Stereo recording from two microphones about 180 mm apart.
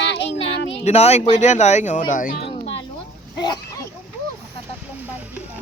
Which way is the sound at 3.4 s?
25° left (ahead or behind).